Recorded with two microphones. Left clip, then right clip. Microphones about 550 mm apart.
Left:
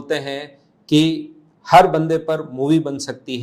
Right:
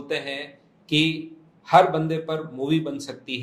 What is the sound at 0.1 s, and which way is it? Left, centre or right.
A man's voice, left.